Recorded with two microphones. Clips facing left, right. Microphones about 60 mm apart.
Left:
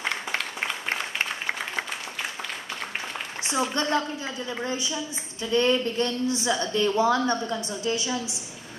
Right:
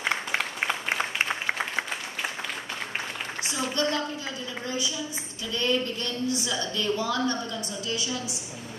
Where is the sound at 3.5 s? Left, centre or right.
Left.